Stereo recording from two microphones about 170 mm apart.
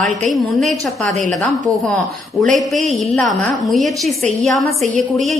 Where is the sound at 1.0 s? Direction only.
45° right (ahead or behind).